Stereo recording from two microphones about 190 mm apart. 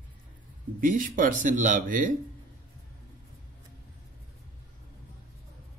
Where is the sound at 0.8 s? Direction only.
45° right (ahead or behind).